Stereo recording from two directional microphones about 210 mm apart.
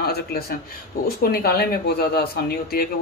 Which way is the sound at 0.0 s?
50° left (ahead or behind).